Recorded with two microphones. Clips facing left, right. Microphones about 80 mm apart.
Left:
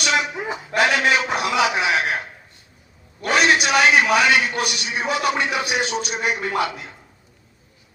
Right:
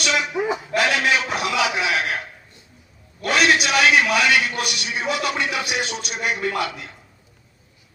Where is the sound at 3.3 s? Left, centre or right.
Left.